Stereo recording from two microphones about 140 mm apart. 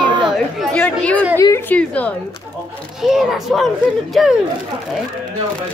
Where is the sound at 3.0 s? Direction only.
Centre (ahead or behind).